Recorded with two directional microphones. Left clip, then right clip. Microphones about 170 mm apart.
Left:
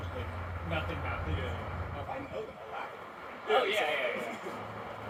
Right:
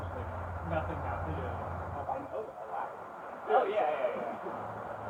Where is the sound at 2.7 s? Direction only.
35° left (ahead or behind).